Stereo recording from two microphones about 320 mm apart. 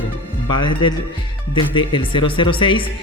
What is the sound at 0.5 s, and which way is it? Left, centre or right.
Speech, centre.